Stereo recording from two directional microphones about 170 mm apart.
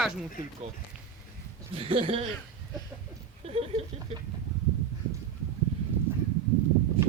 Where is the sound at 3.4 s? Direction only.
35° right (ahead or behind).